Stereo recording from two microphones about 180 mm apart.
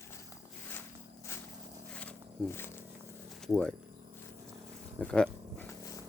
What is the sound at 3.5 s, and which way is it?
Speech, 5° left (ahead or behind).